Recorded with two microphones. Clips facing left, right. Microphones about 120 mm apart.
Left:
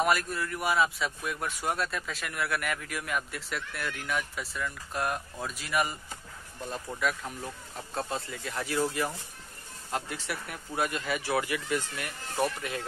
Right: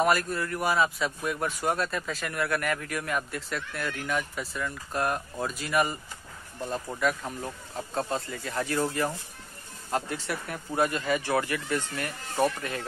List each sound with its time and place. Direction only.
0.0 s speech: centre (ahead or behind)